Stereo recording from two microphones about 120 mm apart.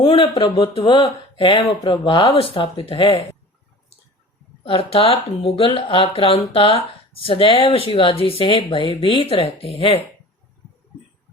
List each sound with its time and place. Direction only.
0.0 s speech: 45° left (ahead or behind)
4.6 s speech: 50° left (ahead or behind)